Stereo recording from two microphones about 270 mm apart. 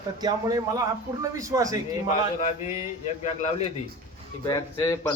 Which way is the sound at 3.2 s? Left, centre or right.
Left.